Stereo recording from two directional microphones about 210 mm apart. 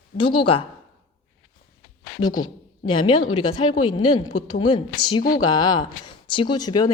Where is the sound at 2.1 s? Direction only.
85° left.